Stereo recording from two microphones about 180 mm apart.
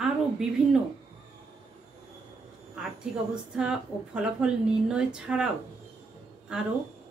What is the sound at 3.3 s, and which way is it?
Speech, 5° right (ahead or behind).